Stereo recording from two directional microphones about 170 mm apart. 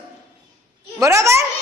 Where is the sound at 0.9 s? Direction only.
20° right (ahead or behind).